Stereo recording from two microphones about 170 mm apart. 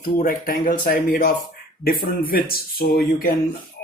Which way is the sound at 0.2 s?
55° left (ahead or behind).